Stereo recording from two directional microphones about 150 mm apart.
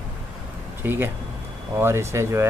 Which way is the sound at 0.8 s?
15° right (ahead or behind).